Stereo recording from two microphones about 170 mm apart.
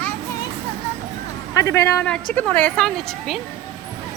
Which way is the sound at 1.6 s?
15° left (ahead or behind).